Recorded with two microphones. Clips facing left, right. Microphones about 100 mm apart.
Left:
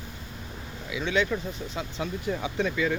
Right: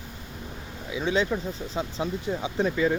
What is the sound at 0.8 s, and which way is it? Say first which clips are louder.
Speech: right 1 dB; 30° right (ahead or behind).